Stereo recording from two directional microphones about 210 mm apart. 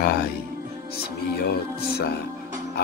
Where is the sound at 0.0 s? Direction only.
50° left (ahead or behind).